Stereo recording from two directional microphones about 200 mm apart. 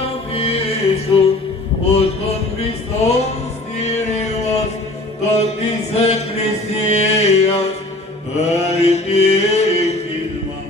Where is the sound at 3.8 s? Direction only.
35° left (ahead or behind).